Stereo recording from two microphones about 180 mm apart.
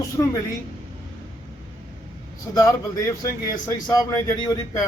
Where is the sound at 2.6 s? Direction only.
15° left (ahead or behind).